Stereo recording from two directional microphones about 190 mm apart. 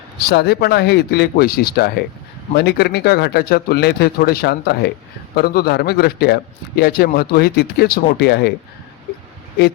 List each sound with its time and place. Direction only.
0.2 s a man's voice: 60° left (ahead or behind)